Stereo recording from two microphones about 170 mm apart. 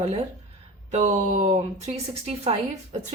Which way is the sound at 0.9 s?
45° right (ahead or behind).